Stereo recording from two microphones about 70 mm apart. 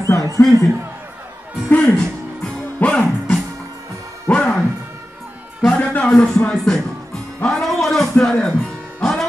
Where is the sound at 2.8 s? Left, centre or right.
Centre.